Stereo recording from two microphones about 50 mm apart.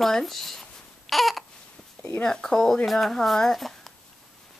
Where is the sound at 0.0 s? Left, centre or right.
Centre.